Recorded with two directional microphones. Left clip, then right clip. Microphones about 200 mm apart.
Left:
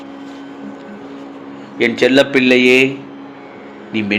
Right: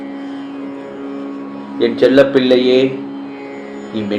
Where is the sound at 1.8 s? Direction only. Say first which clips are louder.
Right 2 dB; 85° left.